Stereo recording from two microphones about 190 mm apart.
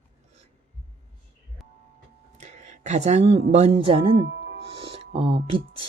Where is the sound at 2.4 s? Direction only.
40° right (ahead or behind).